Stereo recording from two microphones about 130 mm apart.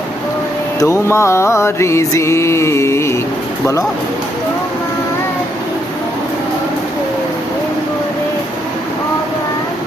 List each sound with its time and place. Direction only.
0.8 s mantra: 20° left (ahead or behind)